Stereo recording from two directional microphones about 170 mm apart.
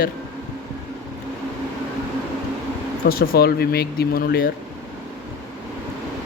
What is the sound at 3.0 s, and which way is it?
Speech, 60° left (ahead or behind).